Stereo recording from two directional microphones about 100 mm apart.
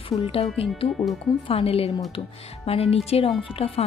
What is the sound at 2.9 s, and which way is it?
Speech, 75° left (ahead or behind).